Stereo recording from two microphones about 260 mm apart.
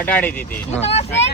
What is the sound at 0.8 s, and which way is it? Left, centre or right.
Speech, left.